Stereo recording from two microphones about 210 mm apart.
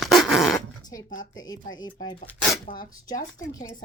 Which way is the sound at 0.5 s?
15° left (ahead or behind).